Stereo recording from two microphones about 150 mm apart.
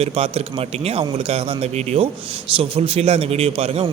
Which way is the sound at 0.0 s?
40° right (ahead or behind).